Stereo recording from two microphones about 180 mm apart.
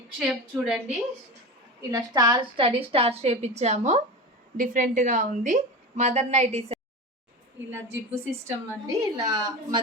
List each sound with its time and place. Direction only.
0.2 s a woman's voice: 5° right (ahead or behind)
1.9 s a woman's voice: 20° right (ahead or behind)
8.4 s a woman's voice: 20° right (ahead or behind)